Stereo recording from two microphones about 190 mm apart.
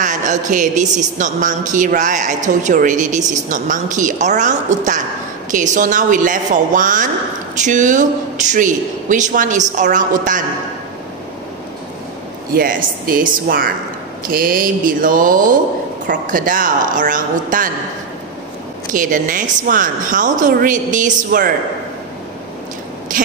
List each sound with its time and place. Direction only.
0.0 s a woman's voice: 40° right (ahead or behind)
12.5 s a woman's voice: 50° right (ahead or behind)
18.9 s a woman's voice: 45° right (ahead or behind)